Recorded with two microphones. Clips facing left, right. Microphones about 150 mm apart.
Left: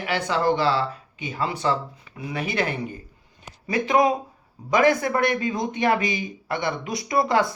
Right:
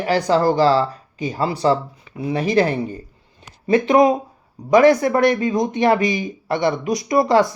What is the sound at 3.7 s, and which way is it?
Speech, 25° right (ahead or behind).